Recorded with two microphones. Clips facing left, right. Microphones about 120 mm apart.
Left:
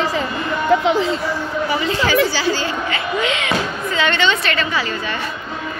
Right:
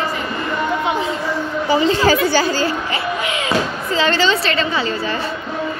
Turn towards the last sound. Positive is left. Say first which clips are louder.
# right 2 dB
turn(degrees=-30)  # may be behind; listen again after turning